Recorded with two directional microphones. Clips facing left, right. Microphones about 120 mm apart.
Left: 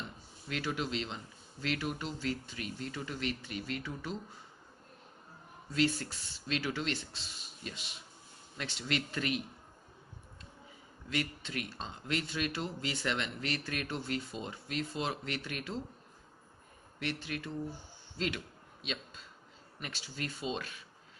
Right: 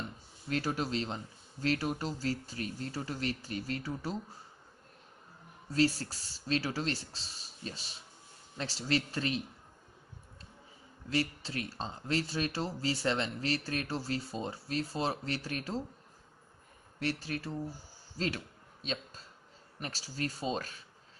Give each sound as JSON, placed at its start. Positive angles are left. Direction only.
{"t": 0.5, "sound": "speech", "side_deg": -40}
{"t": 5.7, "sound": "speech", "side_deg": -35}
{"t": 11.1, "sound": "speech", "side_deg": -35}
{"t": 17.0, "sound": "speech", "side_deg": -35}
{"t": 18.1, "sound": "a sound", "side_deg": -40}
{"t": 19.8, "sound": "speech", "side_deg": -35}